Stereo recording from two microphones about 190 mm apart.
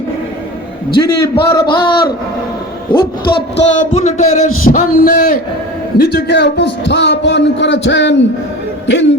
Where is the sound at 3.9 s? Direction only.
35° left (ahead or behind).